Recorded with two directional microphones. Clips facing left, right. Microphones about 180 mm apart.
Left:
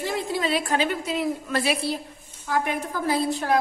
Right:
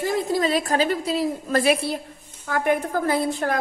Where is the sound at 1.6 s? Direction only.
55° right (ahead or behind).